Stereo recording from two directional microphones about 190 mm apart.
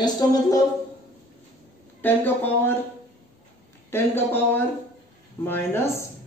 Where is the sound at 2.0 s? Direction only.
10° left (ahead or behind).